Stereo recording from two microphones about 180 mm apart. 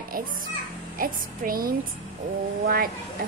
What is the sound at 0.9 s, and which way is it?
Child singing, 50° right (ahead or behind).